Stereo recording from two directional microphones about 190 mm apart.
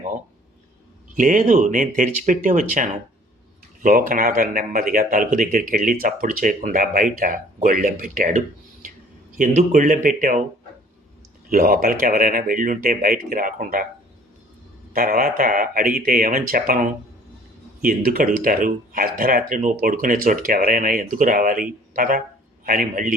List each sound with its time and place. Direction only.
1.1 s speech: 45° right (ahead or behind)
11.4 s speech: 50° right (ahead or behind)
14.9 s speech: 50° right (ahead or behind)